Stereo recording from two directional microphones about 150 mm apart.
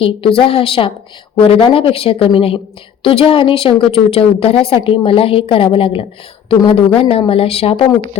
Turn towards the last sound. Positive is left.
turn(degrees=40)  # may be behind; listen again after turning